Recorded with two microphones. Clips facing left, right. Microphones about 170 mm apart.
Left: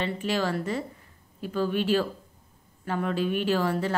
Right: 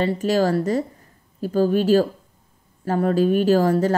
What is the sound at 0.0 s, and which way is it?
Speech, 40° right (ahead or behind).